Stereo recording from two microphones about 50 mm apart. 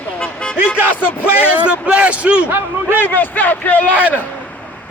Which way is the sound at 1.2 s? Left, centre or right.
Right.